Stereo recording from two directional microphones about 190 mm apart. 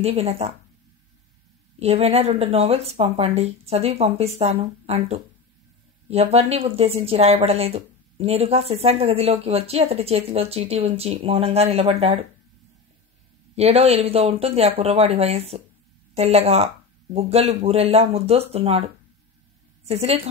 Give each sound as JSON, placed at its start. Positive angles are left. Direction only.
{"t": 0.0, "sound": "speech", "side_deg": -30}
{"t": 1.8, "sound": "speech", "side_deg": -30}
{"t": 13.6, "sound": "a woman's voice", "side_deg": -35}